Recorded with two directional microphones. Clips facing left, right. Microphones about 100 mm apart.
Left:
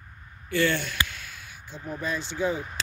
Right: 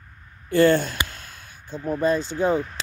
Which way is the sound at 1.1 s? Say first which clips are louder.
Even; 40° right (ahead or behind).